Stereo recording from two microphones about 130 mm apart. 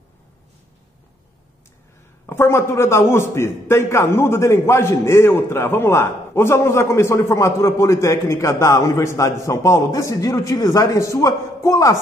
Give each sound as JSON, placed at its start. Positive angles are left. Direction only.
{"t": 2.2, "sound": "a man's voice", "side_deg": 20}